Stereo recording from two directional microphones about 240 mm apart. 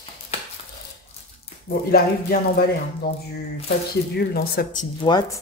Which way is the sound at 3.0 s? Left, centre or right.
Left.